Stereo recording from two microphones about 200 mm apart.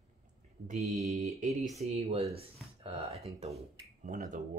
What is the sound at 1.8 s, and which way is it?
Speech, 30° right (ahead or behind).